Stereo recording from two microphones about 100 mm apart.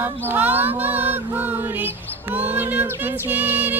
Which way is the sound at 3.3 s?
20° right (ahead or behind).